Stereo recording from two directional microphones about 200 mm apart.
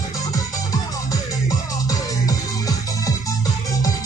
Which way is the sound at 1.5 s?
15° left (ahead or behind).